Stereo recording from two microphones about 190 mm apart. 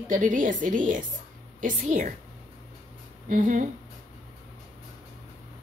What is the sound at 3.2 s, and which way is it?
Speech, 40° right (ahead or behind).